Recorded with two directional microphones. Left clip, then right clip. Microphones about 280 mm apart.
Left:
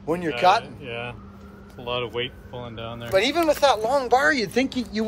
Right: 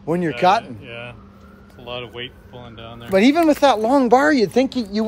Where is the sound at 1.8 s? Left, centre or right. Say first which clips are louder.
Left 3 dB; centre.